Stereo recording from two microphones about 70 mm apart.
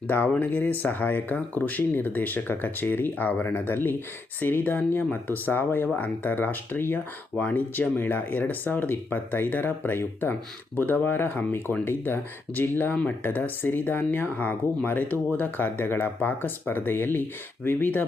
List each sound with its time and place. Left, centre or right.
0.1 s speech: left